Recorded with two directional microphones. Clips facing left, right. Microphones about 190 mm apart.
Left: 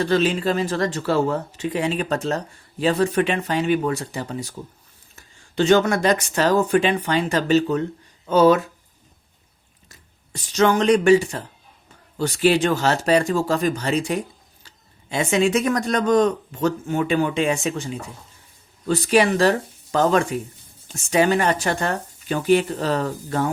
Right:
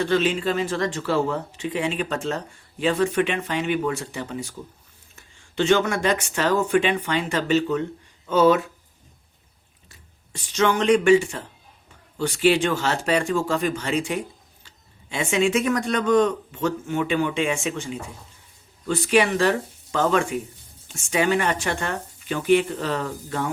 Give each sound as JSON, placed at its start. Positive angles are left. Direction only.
{"t": 0.0, "sound": "speech", "side_deg": 40}
{"t": 9.9, "sound": "speech", "side_deg": 40}